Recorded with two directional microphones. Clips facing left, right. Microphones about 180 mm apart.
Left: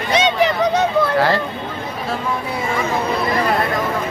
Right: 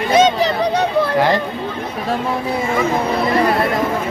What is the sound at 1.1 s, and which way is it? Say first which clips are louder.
Speech: right 3 dB; 15° right (ahead or behind).